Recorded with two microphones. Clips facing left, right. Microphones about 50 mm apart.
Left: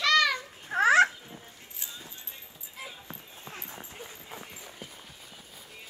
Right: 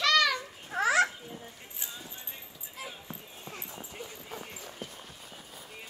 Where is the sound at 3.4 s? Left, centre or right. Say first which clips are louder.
Left 2 dB; left.